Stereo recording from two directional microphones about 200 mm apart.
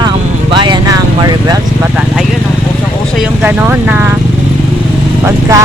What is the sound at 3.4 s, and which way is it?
Speech, 10° right (ahead or behind).